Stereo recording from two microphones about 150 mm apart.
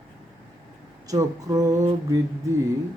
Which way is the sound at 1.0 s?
25° right (ahead or behind).